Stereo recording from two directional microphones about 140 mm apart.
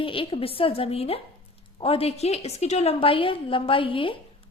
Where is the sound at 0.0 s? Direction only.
40° left (ahead or behind).